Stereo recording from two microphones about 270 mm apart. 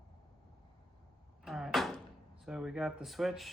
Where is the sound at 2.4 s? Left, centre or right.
Centre.